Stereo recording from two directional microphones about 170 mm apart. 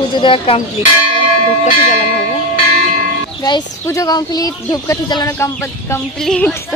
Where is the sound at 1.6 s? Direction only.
45° left (ahead or behind).